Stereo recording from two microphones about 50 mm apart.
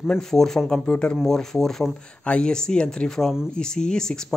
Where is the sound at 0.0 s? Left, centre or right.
Centre.